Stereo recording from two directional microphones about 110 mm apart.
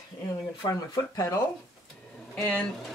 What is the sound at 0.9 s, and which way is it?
Speech, 35° left (ahead or behind).